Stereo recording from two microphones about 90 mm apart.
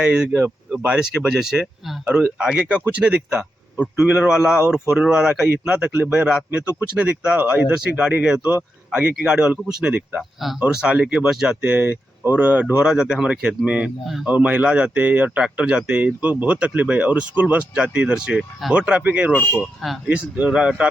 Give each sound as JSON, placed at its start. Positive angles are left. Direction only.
{"t": 0.0, "sound": "speech", "side_deg": -15}
{"t": 10.2, "sound": "speech", "side_deg": 0}
{"t": 19.3, "sound": "speech", "side_deg": 15}
{"t": 20.1, "sound": "speech", "side_deg": -15}